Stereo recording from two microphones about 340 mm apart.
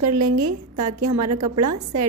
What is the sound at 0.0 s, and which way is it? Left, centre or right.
A woman's voice, right.